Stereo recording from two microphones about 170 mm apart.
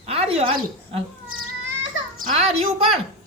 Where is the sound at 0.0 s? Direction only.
35° right (ahead or behind).